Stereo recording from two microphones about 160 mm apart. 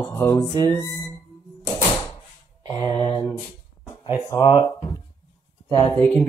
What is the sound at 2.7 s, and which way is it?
Speech, 30° left (ahead or behind).